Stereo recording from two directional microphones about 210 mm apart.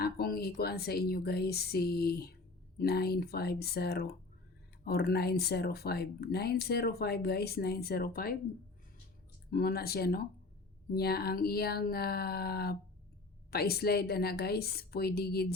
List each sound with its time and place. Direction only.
0.0 s speech: 45° left (ahead or behind)
9.5 s speech: 45° left (ahead or behind)